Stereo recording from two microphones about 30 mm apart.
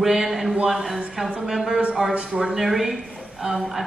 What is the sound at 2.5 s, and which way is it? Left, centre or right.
A woman's voice, centre.